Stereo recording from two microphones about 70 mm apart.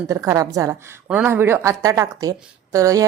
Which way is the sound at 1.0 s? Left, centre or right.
Right.